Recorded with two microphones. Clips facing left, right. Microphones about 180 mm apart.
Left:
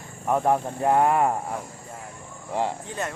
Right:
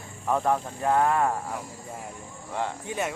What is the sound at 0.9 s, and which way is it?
Speech, 20° left (ahead or behind).